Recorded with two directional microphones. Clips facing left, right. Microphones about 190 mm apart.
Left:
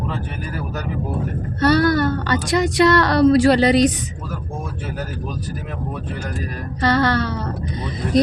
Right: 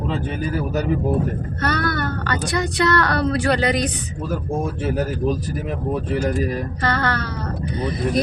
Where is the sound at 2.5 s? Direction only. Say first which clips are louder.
Left 5 dB; 20° left (ahead or behind).